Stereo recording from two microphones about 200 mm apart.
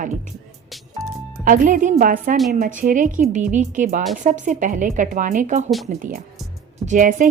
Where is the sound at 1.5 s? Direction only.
40° right (ahead or behind).